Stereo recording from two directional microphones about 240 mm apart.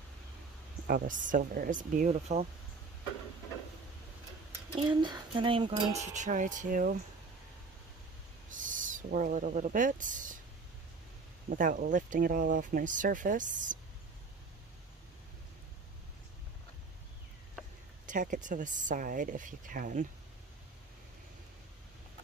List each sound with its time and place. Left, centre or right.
0.8 s speech: right
5.0 s cutlery: centre; by 7.0 s right
8.5 s speech: right
11.4 s speech: right
18.0 s speech: right